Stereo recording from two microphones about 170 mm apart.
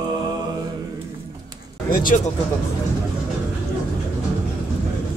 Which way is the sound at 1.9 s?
55° left (ahead or behind).